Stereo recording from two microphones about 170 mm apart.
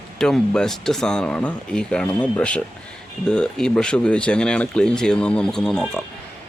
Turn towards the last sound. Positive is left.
turn(degrees=5)  # may be behind; listen again after turning